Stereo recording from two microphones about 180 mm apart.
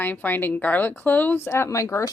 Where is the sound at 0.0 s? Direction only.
10° left (ahead or behind).